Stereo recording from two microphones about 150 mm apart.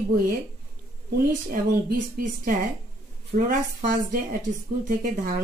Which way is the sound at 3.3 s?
65° right (ahead or behind).